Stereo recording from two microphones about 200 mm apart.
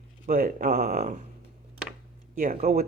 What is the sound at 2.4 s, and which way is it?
Speech, 35° right (ahead or behind).